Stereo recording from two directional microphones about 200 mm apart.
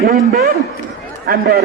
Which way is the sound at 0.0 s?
50° right (ahead or behind).